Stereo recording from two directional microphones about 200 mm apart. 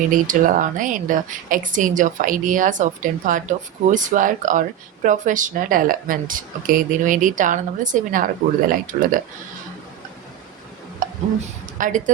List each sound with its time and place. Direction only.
0.1 s a woman's voice: 40° right (ahead or behind)
11.0 s a sound: 40° right (ahead or behind)
11.8 s a woman's voice: 40° right (ahead or behind)